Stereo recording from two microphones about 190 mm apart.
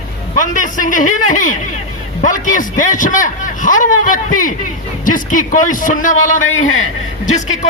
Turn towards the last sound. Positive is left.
turn(degrees=40)  # may be behind; listen again after turning